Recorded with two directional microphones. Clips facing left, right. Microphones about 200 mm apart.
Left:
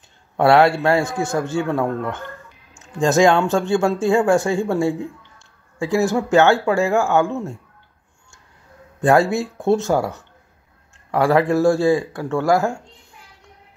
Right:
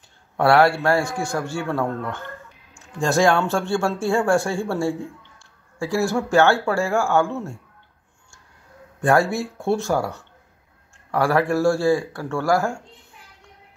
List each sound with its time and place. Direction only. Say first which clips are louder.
0.4 s speech: left 2 dB; 20° left (ahead or behind)
9.0 s speech: left 3 dB; 20° left (ahead or behind)